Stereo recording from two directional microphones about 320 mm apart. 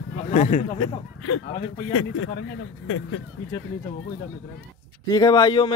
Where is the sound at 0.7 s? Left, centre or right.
Left.